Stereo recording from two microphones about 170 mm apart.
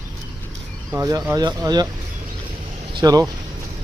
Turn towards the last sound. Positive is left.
turn(degrees=-20)  # may be behind; listen again after turning